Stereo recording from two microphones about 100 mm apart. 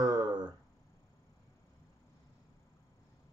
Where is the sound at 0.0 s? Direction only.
45° right (ahead or behind).